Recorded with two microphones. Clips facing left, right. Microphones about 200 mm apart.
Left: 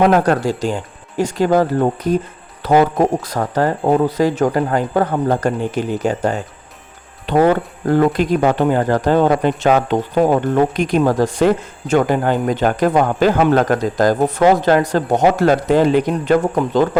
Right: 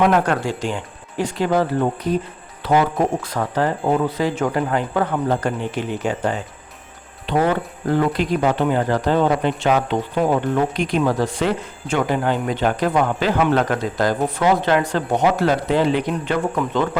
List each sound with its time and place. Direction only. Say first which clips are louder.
0.0 s speech: left 4 dB; 40° left (ahead or behind)